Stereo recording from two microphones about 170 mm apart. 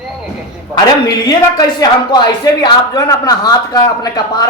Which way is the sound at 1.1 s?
25° left (ahead or behind).